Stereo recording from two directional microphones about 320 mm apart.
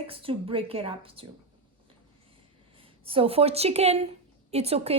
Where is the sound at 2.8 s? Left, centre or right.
Centre.